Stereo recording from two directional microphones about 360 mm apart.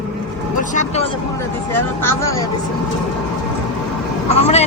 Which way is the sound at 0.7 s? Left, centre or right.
Centre.